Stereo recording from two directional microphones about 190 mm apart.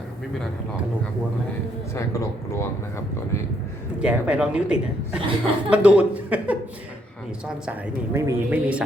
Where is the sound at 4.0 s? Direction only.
5° right (ahead or behind).